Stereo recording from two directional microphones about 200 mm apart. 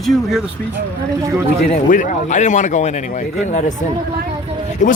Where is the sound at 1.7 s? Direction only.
40° left (ahead or behind).